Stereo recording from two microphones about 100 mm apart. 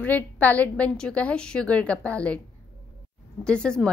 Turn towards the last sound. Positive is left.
turn(degrees=10)  # may be behind; listen again after turning